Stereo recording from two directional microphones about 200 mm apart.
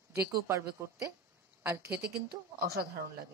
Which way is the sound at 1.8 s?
55° right (ahead or behind).